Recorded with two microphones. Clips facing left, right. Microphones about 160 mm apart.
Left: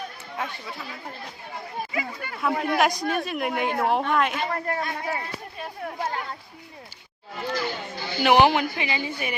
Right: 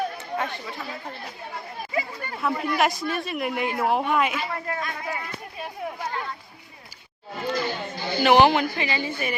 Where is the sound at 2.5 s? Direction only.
55° left (ahead or behind).